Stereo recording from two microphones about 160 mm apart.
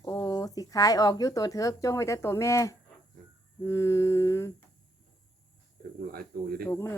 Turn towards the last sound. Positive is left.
turn(degrees=15)  # may be behind; listen again after turning